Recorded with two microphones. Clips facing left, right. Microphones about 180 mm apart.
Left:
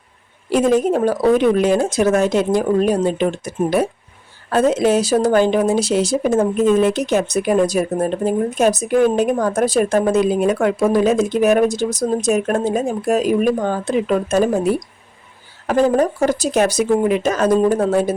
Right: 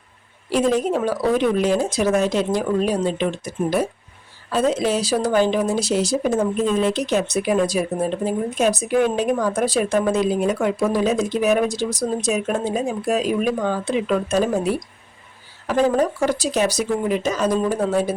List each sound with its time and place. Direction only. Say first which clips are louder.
0.5 s speech: left 4 dB; 50° left (ahead or behind)
15.6 s speech: left 3 dB; 45° left (ahead or behind)